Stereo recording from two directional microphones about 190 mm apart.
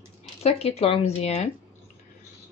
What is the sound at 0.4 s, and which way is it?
Speech, 35° left (ahead or behind).